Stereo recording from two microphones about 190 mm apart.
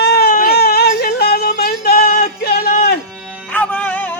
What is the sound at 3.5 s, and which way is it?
Music, 5° left (ahead or behind).